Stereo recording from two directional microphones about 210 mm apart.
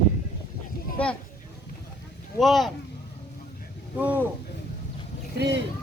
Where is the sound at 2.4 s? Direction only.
Centre (ahead or behind).